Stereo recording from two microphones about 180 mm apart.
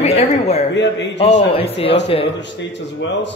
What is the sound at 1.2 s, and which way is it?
Speech, 35° left (ahead or behind).